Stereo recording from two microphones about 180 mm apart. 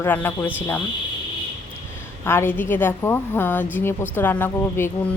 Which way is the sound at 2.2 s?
15° left (ahead or behind).